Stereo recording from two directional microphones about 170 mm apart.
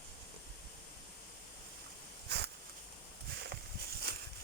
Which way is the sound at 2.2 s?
75° right (ahead or behind).